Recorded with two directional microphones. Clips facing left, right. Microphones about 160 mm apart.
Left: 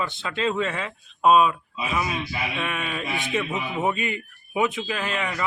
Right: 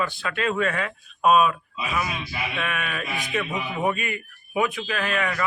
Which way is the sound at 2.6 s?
25° left (ahead or behind).